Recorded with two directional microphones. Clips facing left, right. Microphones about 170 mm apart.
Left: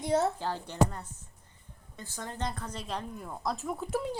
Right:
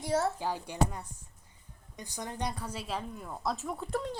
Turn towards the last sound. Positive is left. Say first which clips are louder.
# left 2 dB
turn(degrees=5)  # may be behind; listen again after turning